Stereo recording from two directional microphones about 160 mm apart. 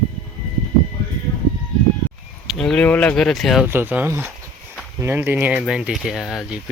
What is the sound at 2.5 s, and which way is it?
Speech, centre (ahead or behind).